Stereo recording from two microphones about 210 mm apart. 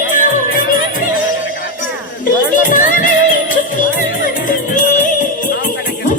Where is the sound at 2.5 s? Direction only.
40° left (ahead or behind).